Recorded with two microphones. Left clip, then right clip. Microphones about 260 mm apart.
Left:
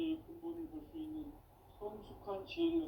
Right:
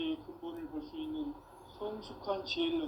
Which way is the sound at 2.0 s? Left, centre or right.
Right.